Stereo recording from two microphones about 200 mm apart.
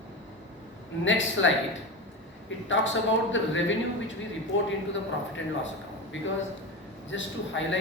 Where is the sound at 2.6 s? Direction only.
70° left (ahead or behind).